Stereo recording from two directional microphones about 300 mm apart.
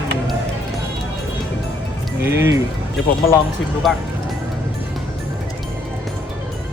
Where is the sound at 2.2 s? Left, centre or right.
Centre.